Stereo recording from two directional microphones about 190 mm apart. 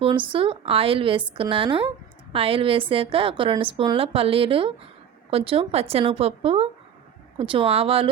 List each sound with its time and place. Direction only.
0.0 s a woman's voice: 25° right (ahead or behind)